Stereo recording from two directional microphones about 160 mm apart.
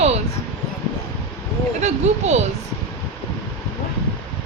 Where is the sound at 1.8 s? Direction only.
45° right (ahead or behind).